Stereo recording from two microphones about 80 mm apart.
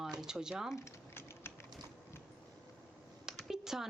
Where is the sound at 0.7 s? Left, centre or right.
Left.